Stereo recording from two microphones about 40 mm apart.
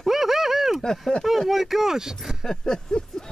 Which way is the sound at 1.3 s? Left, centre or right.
Centre.